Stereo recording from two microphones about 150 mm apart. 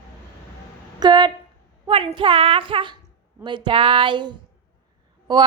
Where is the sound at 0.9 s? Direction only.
30° right (ahead or behind).